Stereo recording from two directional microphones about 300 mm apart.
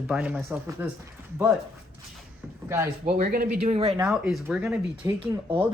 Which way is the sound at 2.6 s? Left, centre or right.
Centre.